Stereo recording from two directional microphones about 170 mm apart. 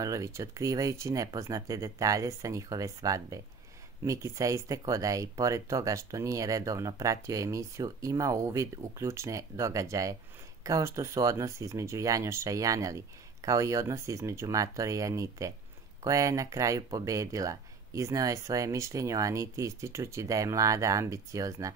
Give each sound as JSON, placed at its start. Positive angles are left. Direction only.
{"t": 0.0, "sound": "speech", "side_deg": -20}